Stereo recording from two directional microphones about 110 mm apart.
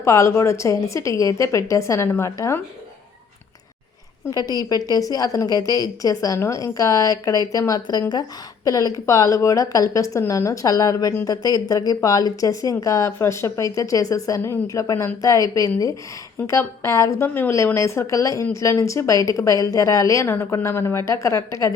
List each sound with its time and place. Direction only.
0.0 s a woman's voice: 25° left (ahead or behind)
4.3 s speech: 35° left (ahead or behind)
11.3 s a woman's voice: 35° left (ahead or behind)